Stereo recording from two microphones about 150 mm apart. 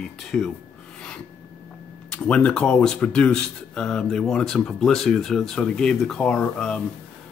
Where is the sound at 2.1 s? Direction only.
5° left (ahead or behind).